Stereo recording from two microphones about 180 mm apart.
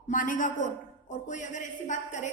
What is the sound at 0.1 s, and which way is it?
A man's voice, 45° left (ahead or behind).